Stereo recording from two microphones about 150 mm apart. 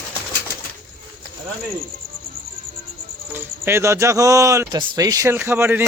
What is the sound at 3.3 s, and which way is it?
Speech, 15° right (ahead or behind).